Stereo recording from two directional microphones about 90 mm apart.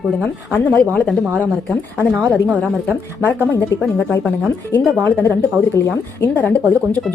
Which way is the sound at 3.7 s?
35° left (ahead or behind).